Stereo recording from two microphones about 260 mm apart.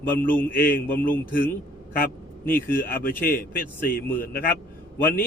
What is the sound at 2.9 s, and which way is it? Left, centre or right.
Speech, left.